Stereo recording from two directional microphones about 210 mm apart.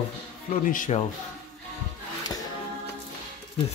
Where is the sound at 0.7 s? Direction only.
40° left (ahead or behind).